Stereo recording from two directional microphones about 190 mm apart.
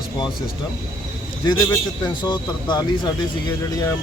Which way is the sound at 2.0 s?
25° left (ahead or behind).